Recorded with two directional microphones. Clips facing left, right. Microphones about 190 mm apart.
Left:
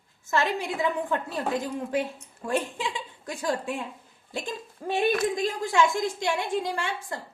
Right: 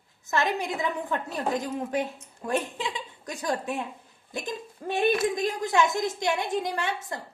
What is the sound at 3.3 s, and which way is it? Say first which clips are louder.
A woman's voice: left 1 dB; 20° right (ahead or behind).